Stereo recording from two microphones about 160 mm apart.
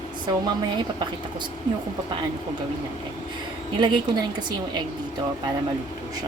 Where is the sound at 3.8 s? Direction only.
25° right (ahead or behind).